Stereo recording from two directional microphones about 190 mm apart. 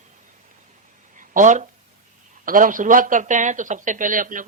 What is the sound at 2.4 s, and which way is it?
A man's voice, 45° right (ahead or behind).